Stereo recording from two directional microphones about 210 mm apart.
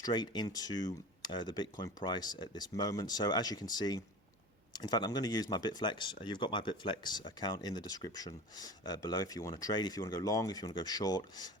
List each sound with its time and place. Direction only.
0.0 s speech: 20° left (ahead or behind)